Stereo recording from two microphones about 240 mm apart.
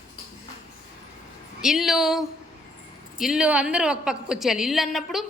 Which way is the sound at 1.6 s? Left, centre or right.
Centre.